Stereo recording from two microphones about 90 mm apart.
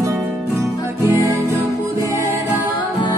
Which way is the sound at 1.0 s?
35° right (ahead or behind).